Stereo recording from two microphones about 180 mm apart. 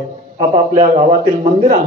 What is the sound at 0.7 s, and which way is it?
A man's voice, 40° right (ahead or behind).